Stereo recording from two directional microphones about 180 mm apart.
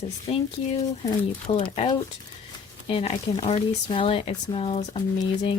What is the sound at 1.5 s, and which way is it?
Speech, 30° left (ahead or behind).